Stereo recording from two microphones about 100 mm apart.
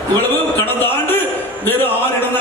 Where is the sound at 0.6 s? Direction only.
20° left (ahead or behind).